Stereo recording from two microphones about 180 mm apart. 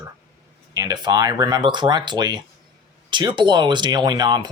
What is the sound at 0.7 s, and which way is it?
Speech, 20° right (ahead or behind).